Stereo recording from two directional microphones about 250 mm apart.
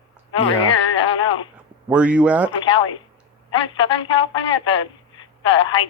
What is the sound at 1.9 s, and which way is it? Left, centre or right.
Speech, centre.